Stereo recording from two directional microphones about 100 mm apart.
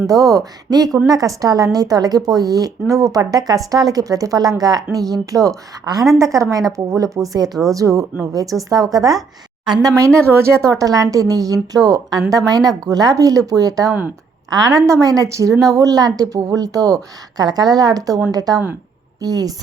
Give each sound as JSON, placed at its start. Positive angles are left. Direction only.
{"t": 0.1, "sound": "a woman's voice", "side_deg": -40}